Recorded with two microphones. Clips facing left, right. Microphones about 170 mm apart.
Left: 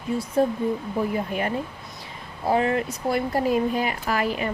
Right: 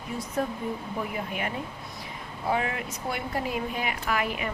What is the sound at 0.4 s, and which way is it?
Speech, 30° left (ahead or behind).